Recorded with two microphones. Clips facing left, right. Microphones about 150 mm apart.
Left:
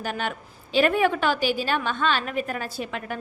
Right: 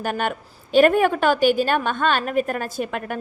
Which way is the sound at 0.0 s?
50° right (ahead or behind).